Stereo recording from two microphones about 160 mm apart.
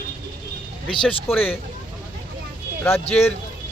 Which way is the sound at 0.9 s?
5° left (ahead or behind).